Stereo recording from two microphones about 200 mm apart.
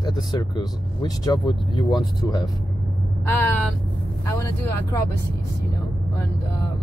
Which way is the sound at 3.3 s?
10° left (ahead or behind).